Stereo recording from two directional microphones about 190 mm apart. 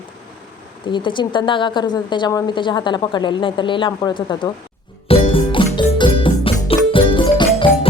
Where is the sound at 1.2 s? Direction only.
25° left (ahead or behind).